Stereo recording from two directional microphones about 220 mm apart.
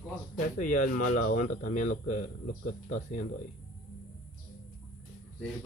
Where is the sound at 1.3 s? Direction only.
40° left (ahead or behind).